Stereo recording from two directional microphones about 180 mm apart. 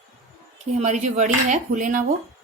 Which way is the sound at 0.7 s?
40° right (ahead or behind).